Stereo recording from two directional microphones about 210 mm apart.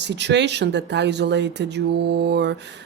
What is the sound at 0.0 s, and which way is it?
A woman's voice, 55° right (ahead or behind).